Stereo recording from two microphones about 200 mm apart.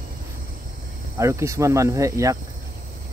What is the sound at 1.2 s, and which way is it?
Speech, 15° right (ahead or behind).